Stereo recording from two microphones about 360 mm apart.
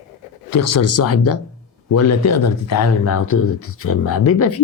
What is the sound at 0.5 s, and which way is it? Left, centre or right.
Speech, left.